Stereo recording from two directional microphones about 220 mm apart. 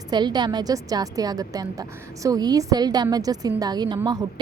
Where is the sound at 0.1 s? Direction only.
20° right (ahead or behind).